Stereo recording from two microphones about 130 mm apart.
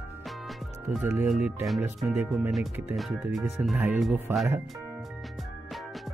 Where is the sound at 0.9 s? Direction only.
10° right (ahead or behind).